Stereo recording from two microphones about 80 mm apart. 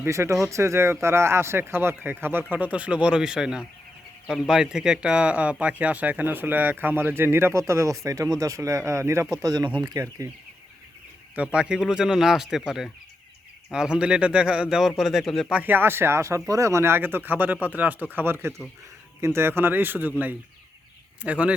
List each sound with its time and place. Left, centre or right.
0.0 s a man's voice: right
7.6 s speech: right
9.3 s speech: right
10.2 s speech: right
11.3 s a man's voice: centre
15.6 s a man's voice: right